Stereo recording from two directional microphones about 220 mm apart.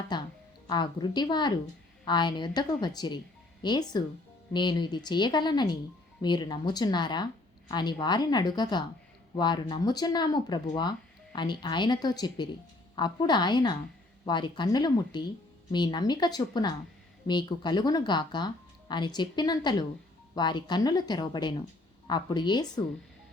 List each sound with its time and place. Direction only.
0.1 s music: 20° left (ahead or behind)
0.7 s speech: 20° left (ahead or behind)